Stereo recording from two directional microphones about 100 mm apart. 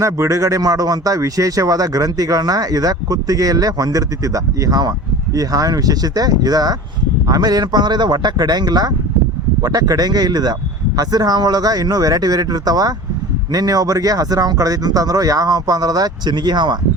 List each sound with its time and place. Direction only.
0.0 s speech: 30° right (ahead or behind)